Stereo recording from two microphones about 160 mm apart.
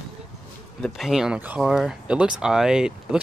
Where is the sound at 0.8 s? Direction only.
Centre (ahead or behind).